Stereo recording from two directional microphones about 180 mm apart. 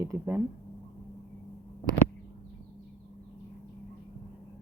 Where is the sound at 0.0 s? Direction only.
15° right (ahead or behind).